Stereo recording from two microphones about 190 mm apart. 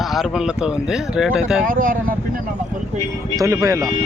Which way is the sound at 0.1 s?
Centre (ahead or behind).